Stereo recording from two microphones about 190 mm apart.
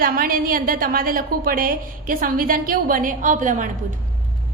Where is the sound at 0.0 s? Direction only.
50° right (ahead or behind).